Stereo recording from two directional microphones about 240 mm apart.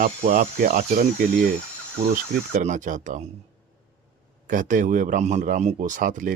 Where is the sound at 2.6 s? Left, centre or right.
Right.